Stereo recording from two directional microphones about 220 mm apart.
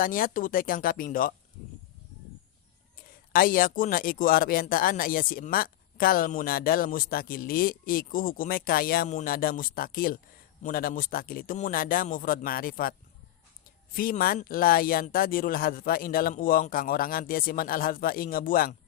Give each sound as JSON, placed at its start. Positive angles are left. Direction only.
{"t": 0.0, "sound": "speech", "side_deg": 40}
{"t": 3.3, "sound": "speech", "side_deg": 40}
{"t": 13.9, "sound": "speech", "side_deg": 40}